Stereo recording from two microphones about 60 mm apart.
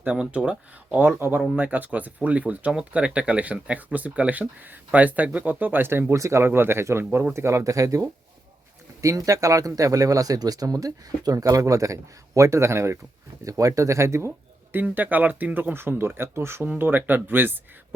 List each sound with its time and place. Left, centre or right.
0.3 s speech: right
1.1 s speech: right
1.5 s speech: right
6.1 s speech: right
6.4 s speech: right
13.4 s speech: right
14.7 s speech: right
15.7 s speech: right